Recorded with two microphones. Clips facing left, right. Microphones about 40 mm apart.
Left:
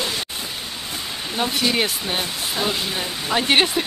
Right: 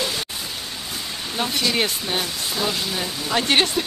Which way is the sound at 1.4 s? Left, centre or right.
Centre.